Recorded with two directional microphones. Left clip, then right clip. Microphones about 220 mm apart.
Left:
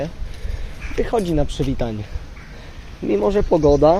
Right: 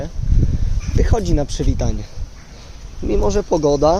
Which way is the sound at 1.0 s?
5° right (ahead or behind).